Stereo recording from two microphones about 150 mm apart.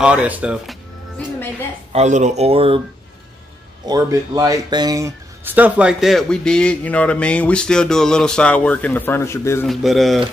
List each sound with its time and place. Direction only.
0.0 s speech: 5° right (ahead or behind)
1.9 s speech: 50° right (ahead or behind)
3.8 s speech: 25° right (ahead or behind); by 9.7 s 20° left (ahead or behind)
9.7 s speech: centre (ahead or behind)